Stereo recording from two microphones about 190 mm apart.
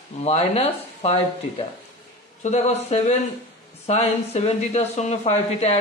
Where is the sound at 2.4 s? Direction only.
35° left (ahead or behind).